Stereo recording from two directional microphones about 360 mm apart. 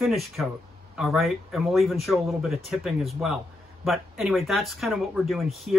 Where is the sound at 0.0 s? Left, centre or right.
Centre.